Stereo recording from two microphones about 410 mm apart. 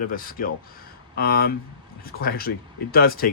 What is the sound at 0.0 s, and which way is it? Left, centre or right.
Speech, left.